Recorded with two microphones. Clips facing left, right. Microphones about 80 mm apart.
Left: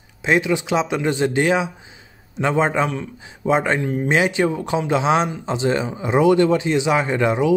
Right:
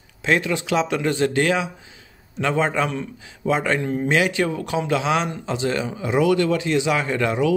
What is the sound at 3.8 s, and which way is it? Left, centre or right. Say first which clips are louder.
Speech: left 1 dB; centre.